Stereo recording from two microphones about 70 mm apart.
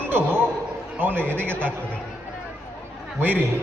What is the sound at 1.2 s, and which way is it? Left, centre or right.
Speech, centre.